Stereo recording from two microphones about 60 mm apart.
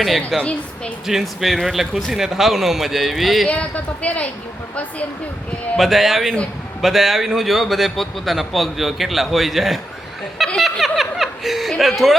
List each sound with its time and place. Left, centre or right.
0.3 s a man's voice: centre
3.5 s speech: left
5.7 s a man's voice: centre
10.6 s snicker: centre
11.8 s a man's voice: centre